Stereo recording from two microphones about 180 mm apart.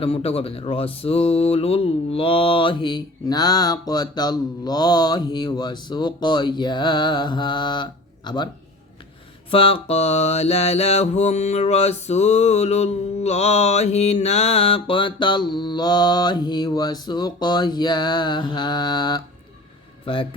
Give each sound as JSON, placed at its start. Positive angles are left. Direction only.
{"t": 0.0, "sound": "speech", "side_deg": 30}
{"t": 9.5, "sound": "mantra", "side_deg": 30}
{"t": 20.1, "sound": "speech", "side_deg": 30}